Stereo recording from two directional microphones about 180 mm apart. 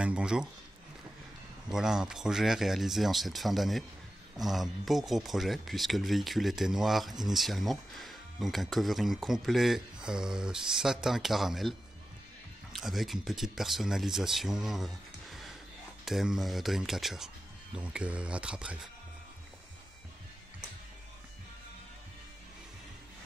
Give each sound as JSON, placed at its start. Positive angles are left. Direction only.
{"t": 0.0, "sound": "speech", "side_deg": -5}
{"t": 1.7, "sound": "speech", "side_deg": -5}
{"t": 12.7, "sound": "speech", "side_deg": 0}